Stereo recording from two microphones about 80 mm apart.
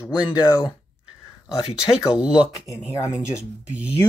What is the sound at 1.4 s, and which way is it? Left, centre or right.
Speech, centre.